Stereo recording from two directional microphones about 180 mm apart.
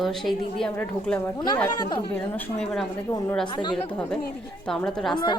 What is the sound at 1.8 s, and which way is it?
Speech, 25° left (ahead or behind).